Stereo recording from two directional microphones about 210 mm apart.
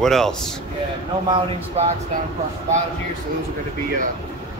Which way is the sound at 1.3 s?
30° right (ahead or behind).